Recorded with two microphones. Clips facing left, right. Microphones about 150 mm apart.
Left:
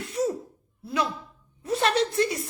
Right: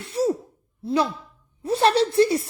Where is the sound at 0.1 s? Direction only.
30° right (ahead or behind).